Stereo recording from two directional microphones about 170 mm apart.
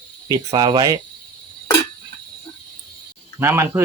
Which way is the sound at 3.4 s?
15° right (ahead or behind).